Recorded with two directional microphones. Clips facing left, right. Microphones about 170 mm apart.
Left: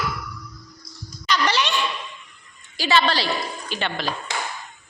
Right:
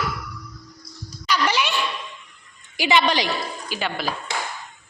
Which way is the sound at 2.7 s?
15° right (ahead or behind).